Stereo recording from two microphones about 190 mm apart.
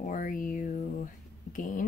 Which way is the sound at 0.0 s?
45° left (ahead or behind).